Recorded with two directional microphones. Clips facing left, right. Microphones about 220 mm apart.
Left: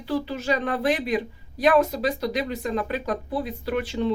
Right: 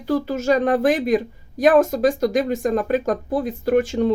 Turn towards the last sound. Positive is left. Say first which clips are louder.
# right 7 dB
turn(degrees=-45)  # may be behind; listen again after turning